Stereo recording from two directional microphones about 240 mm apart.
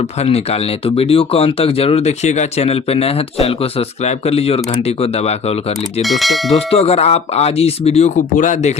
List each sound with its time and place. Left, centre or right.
0.2 s speech: left
6.0 s speech: centre
6.7 s speech: left